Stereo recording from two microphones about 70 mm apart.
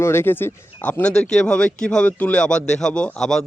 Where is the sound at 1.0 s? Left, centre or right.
Centre.